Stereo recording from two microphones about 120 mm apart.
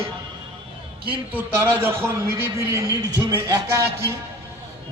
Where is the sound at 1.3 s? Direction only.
15° right (ahead or behind).